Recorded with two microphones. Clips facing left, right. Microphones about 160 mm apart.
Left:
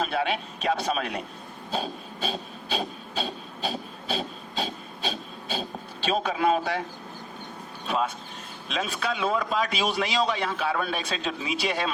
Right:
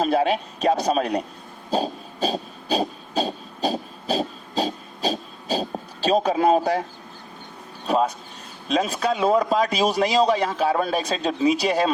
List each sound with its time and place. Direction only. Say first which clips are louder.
0.0 s a man's voice: right 7 dB; 40° right (ahead or behind)
1.7 s a sound: right 7 dB; 40° right (ahead or behind)
7.9 s a man's voice: right 6 dB; 40° right (ahead or behind)